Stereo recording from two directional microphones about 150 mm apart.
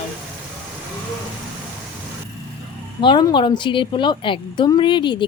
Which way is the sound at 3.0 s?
30° left (ahead or behind).